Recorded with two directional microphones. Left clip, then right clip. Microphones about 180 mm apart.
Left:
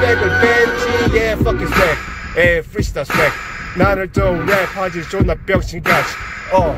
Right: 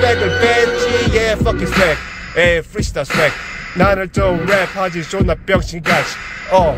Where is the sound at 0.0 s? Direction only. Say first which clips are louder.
Even; 10° right (ahead or behind).